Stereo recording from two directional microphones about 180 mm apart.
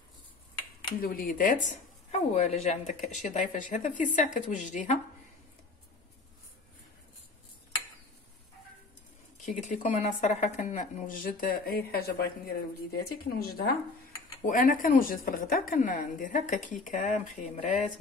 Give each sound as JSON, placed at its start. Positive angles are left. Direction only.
{"t": 1.0, "sound": "a woman's voice", "side_deg": 55}
{"t": 2.0, "sound": "a woman's voice", "side_deg": 35}
{"t": 9.4, "sound": "a woman's voice", "side_deg": 45}
{"t": 14.5, "sound": "a woman's voice", "side_deg": 50}